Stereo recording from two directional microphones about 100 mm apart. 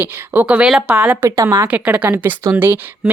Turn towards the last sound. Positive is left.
turn(degrees=-25)  # may be behind; listen again after turning